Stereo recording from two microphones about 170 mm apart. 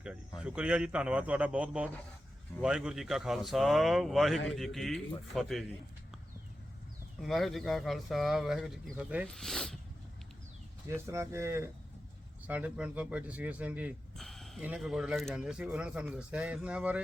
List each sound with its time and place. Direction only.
0.3 s a man's voice: 5° right (ahead or behind)
7.2 s speech: centre (ahead or behind)
10.8 s a man's voice: 15° right (ahead or behind)
14.2 s a man's voice: centre (ahead or behind)